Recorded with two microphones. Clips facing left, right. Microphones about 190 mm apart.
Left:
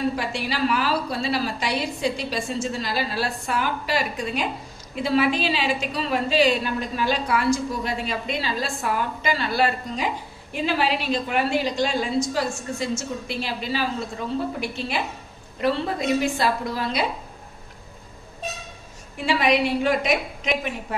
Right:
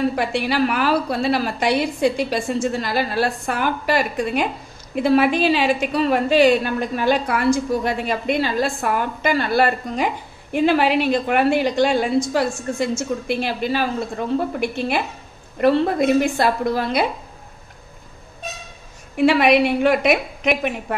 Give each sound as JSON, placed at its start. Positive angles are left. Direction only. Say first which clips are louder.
{"t": 0.1, "sound": "a woman's voice", "louder": "right 6 dB", "side_deg": -60}
{"t": 19.1, "sound": "a woman's voice", "louder": "right 6 dB", "side_deg": -65}